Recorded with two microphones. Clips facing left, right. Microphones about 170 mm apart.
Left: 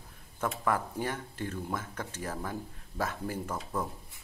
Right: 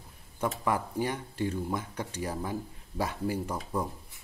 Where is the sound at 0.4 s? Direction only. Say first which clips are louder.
Right 1 dB; 10° right (ahead or behind).